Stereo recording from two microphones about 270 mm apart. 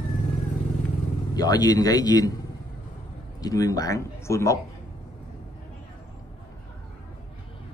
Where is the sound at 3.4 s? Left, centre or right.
Centre.